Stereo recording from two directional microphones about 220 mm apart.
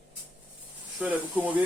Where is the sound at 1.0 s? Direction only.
5° right (ahead or behind).